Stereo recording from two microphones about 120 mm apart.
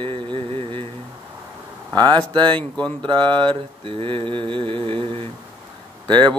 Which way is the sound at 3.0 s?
40° right (ahead or behind).